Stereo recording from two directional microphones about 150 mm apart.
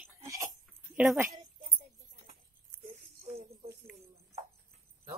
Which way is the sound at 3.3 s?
90° right.